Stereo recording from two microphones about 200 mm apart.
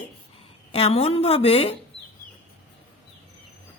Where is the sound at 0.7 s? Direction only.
30° left (ahead or behind).